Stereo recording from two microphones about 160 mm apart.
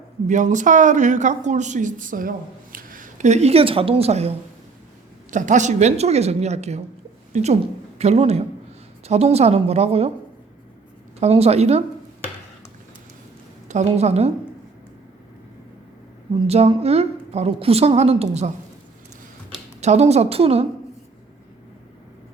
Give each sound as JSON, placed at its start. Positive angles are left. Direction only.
{"t": 0.3, "sound": "a woman's voice", "side_deg": -50}
{"t": 5.3, "sound": "a woman's voice", "side_deg": -50}
{"t": 11.2, "sound": "a woman's voice", "side_deg": -40}
{"t": 13.7, "sound": "a woman's voice", "side_deg": -45}
{"t": 16.3, "sound": "a woman's voice", "side_deg": -35}
{"t": 19.8, "sound": "a woman's voice", "side_deg": -45}